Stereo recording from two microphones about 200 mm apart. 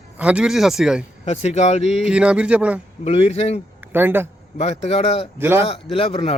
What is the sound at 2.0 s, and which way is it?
Speech, 5° right (ahead or behind).